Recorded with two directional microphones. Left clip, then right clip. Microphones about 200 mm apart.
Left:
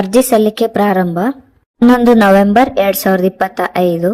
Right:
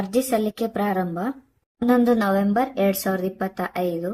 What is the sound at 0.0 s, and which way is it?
Speech, 40° left (ahead or behind).